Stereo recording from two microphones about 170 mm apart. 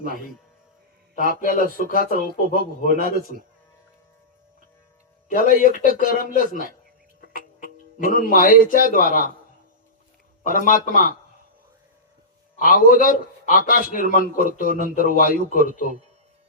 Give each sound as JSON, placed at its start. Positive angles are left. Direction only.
{"t": 1.4, "sound": "a man's voice", "side_deg": 55}
{"t": 5.3, "sound": "a man's voice", "side_deg": 55}
{"t": 10.4, "sound": "a man's voice", "side_deg": 55}
{"t": 12.5, "sound": "a man's voice", "side_deg": 55}